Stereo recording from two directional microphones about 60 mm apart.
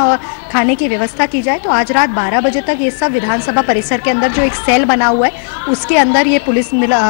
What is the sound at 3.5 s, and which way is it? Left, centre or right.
A woman's voice, centre.